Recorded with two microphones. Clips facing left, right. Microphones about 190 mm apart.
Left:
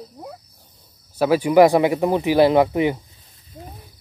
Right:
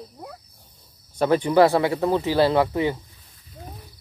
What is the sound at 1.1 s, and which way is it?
Speech, 5° left (ahead or behind).